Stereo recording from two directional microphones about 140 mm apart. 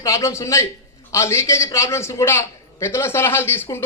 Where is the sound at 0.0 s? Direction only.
20° left (ahead or behind).